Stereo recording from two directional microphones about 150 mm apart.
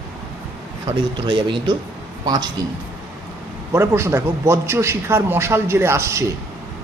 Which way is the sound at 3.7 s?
15° right (ahead or behind).